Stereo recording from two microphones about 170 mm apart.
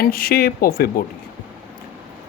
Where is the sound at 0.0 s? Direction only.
60° left (ahead or behind).